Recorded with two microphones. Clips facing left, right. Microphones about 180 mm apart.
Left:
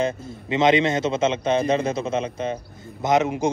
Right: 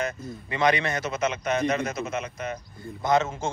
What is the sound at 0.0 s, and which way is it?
A man's voice, 25° left (ahead or behind).